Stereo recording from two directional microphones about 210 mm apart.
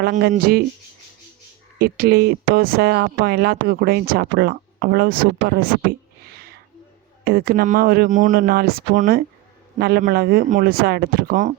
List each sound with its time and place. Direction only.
0.0 s speech: 45° right (ahead or behind)
1.8 s speech: 50° right (ahead or behind)
6.3 s a sound: 50° right (ahead or behind)
7.3 s speech: 45° right (ahead or behind)